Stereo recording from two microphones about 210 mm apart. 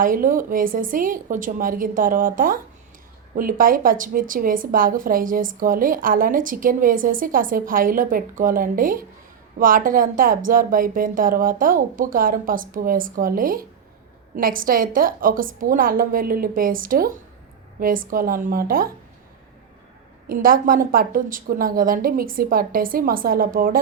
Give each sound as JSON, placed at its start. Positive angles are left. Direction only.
{"t": 0.0, "sound": "a woman's voice", "side_deg": -40}
{"t": 20.2, "sound": "a woman's voice", "side_deg": -40}